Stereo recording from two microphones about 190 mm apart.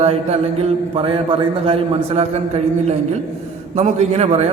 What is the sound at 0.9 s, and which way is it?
A man's voice, 30° right (ahead or behind).